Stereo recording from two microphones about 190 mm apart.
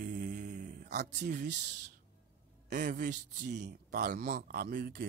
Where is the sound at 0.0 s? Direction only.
45° right (ahead or behind).